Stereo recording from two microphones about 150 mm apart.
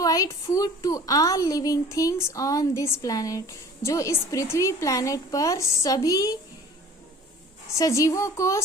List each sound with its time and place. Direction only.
0.0 s a woman's voice: 25° left (ahead or behind)
7.7 s a woman's voice: 20° left (ahead or behind)